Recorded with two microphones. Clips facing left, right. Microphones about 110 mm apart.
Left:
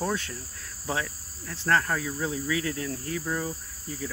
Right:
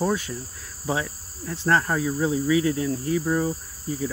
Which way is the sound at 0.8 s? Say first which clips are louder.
Right 4 dB; 20° right (ahead or behind).